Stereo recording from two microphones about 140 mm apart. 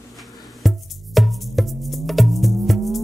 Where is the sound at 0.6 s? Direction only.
Centre (ahead or behind).